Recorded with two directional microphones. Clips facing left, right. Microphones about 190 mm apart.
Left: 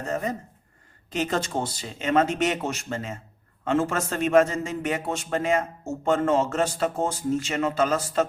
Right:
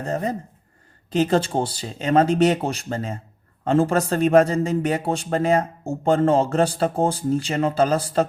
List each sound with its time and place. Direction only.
0.0 s a man's voice: 35° right (ahead or behind)